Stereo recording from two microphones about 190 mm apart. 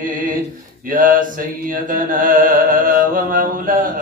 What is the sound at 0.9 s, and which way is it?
Mantra, 45° right (ahead or behind).